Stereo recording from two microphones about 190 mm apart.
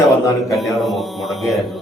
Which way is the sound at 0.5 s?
Centre (ahead or behind).